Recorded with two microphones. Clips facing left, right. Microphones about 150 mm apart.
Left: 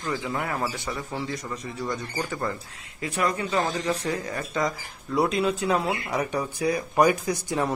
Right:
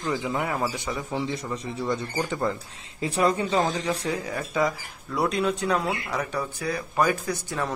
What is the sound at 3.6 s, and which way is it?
Speech, 10° right (ahead or behind).